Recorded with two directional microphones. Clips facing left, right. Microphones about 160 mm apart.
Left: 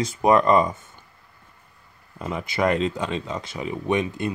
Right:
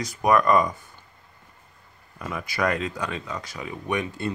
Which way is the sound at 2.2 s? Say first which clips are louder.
Left 3 dB; 25° left (ahead or behind).